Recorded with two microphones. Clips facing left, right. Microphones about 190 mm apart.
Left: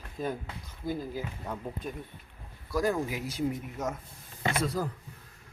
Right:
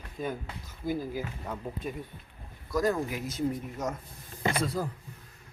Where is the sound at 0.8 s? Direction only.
10° right (ahead or behind).